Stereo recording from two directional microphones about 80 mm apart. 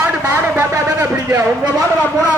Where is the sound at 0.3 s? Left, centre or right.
Right.